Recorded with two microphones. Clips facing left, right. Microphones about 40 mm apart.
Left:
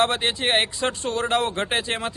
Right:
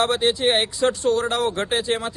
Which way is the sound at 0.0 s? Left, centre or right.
Left.